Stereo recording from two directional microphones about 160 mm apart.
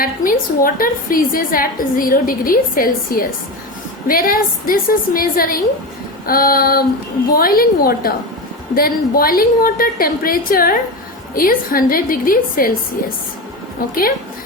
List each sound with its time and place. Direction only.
0.0 s a woman's voice: 65° left (ahead or behind)